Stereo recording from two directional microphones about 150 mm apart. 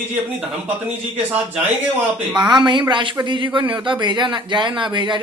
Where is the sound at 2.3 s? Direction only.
5° right (ahead or behind).